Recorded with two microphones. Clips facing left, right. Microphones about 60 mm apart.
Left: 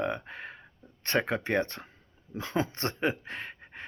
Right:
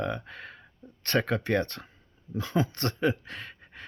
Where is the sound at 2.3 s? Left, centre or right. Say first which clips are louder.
Right 2 dB; left.